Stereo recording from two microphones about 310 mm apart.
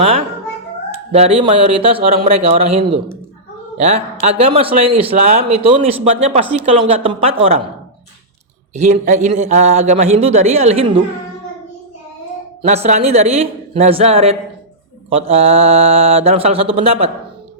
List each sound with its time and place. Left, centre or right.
1.1 s a man's voice: centre
8.7 s a man's voice: right
12.6 s a man's voice: right